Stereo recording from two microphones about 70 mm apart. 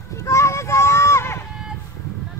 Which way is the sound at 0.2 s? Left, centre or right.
Left.